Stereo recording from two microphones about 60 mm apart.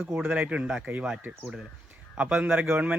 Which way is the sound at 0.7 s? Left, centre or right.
Centre.